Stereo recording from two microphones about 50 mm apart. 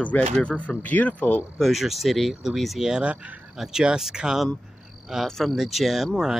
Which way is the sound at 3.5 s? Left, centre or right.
Centre.